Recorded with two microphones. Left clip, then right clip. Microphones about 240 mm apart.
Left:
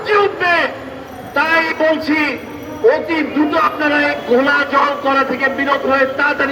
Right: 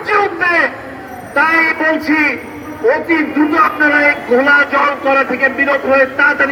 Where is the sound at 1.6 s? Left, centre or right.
Left.